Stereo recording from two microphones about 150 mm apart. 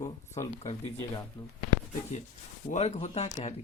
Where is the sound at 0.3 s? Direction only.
50° left (ahead or behind).